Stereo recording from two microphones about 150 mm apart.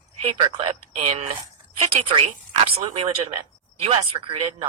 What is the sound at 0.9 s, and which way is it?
A woman's voice, 45° right (ahead or behind).